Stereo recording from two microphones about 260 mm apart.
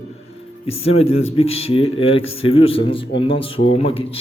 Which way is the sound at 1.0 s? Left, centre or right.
Left.